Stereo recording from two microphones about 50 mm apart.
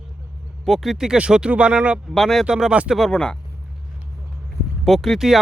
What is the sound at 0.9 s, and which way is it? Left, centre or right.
Speech, centre.